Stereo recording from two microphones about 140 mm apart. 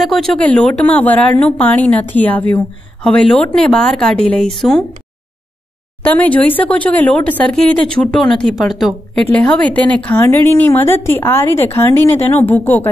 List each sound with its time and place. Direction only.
0.0 s a woman's voice: centre (ahead or behind)
6.0 s a woman's voice: 10° left (ahead or behind)